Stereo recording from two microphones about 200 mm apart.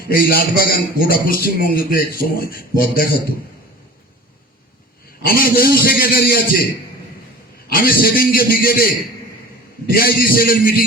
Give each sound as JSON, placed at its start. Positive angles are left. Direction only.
{"t": 0.1, "sound": "a man's voice", "side_deg": 45}
{"t": 5.2, "sound": "a man's voice", "side_deg": 45}
{"t": 7.7, "sound": "a man's voice", "side_deg": 45}
{"t": 9.9, "sound": "a man's voice", "side_deg": 50}